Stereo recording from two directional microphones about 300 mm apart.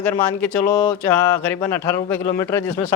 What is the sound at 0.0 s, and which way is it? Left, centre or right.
Speech, centre.